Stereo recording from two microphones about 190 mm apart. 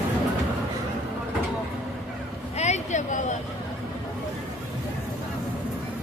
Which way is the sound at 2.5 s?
35° left (ahead or behind).